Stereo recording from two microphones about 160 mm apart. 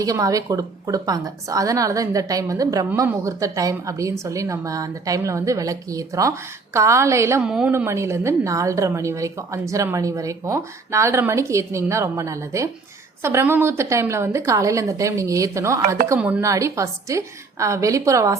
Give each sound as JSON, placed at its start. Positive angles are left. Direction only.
{"t": 0.0, "sound": "a woman's voice", "side_deg": -20}
{"t": 7.4, "sound": "a woman's voice", "side_deg": -5}
{"t": 7.7, "sound": "a woman's voice", "side_deg": -15}